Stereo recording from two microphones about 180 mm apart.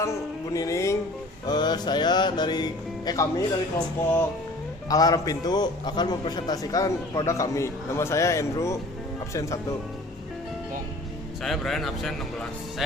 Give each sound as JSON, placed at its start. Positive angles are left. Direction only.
{"t": 0.5, "sound": "music", "side_deg": 15}
{"t": 1.5, "sound": "a man's voice", "side_deg": 25}
{"t": 9.3, "sound": "music", "side_deg": 15}
{"t": 11.4, "sound": "speech", "side_deg": 0}